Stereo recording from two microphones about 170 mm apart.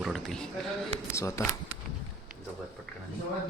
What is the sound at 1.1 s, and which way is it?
Speech, 15° left (ahead or behind).